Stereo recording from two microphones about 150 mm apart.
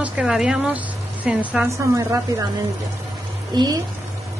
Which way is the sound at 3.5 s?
30° right (ahead or behind).